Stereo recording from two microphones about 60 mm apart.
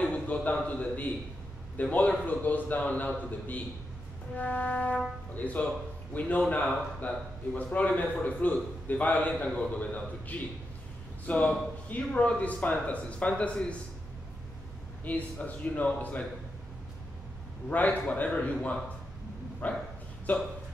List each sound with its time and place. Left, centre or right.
0.0 s a sound: left
1.8 s a man's voice: left
15.0 s a man's voice: left
17.6 s a man's voice: left